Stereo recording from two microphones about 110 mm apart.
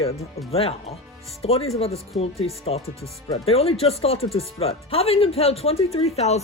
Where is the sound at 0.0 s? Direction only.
65° left (ahead or behind).